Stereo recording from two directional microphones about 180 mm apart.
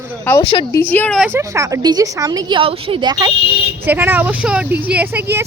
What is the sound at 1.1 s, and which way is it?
A woman's voice, 10° right (ahead or behind).